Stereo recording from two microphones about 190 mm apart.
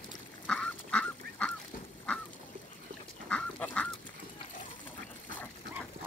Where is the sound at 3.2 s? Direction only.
5° left (ahead or behind).